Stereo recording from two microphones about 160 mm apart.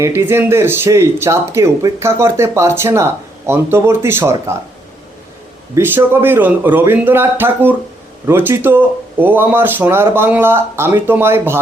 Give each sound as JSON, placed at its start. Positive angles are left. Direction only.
{"t": 0.0, "sound": "speech", "side_deg": -15}
{"t": 5.7, "sound": "speech", "side_deg": -15}